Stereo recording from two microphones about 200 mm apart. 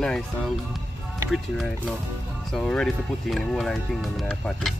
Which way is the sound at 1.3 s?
Centre (ahead or behind).